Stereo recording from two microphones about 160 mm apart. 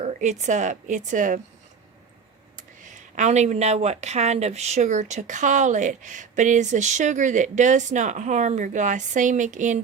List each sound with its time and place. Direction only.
0.0 s speech: 50° right (ahead or behind)
3.2 s speech: 45° right (ahead or behind)